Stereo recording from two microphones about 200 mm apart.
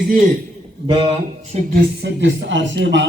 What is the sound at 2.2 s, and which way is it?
Speech, 65° right (ahead or behind).